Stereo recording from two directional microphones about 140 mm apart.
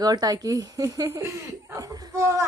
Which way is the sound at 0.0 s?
30° right (ahead or behind).